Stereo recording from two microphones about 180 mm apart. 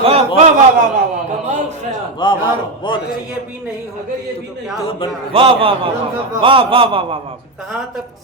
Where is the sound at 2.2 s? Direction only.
25° left (ahead or behind).